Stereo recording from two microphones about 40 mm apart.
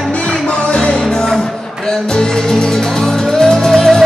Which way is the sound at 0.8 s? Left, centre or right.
Centre.